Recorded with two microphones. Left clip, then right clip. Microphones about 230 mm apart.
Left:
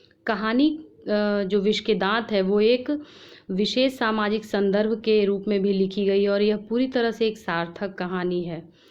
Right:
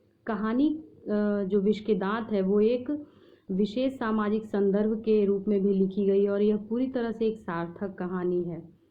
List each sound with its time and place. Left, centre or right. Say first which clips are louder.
0.3 s a woman's voice: left 5 dB; left